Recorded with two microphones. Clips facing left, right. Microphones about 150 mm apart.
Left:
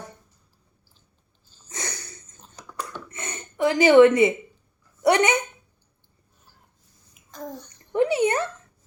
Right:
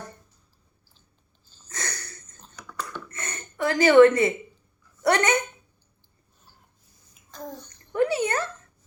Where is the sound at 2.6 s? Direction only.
35° left (ahead or behind).